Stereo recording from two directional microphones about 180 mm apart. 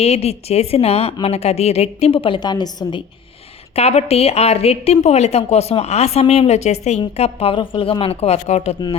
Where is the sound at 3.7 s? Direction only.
35° left (ahead or behind).